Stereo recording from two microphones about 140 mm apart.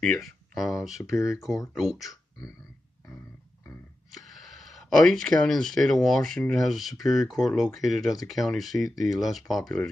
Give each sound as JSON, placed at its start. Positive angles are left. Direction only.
{"t": 0.0, "sound": "speech", "side_deg": 0}
{"t": 1.0, "sound": "speech", "side_deg": 20}
{"t": 1.3, "sound": "speech", "side_deg": 0}
{"t": 4.1, "sound": "speech", "side_deg": 0}